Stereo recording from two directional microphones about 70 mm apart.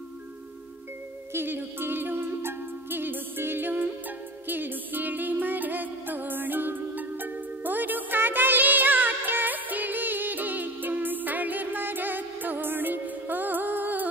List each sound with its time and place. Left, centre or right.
1.3 s music: right